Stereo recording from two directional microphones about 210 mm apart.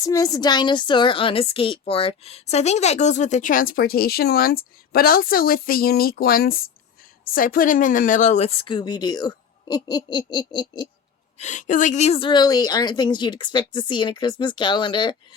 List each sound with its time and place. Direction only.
0.0 s a woman's voice: 15° left (ahead or behind)
11.3 s a woman's voice: 35° left (ahead or behind)